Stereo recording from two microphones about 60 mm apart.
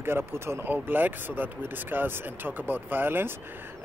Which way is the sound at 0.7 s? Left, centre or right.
Right.